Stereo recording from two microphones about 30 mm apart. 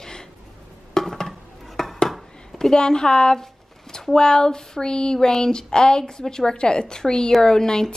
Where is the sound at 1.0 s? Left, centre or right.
Centre.